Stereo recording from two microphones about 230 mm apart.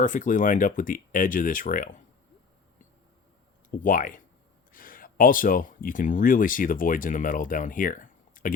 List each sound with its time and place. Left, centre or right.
0.0 s speech: left
3.8 s speech: left